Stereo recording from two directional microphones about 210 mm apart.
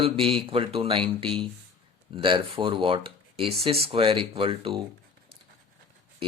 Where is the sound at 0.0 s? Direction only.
25° right (ahead or behind).